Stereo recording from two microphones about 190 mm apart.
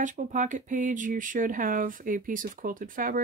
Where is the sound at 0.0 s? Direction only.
40° right (ahead or behind).